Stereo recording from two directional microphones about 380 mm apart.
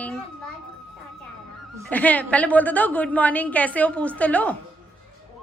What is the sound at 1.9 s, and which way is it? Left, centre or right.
Music, centre.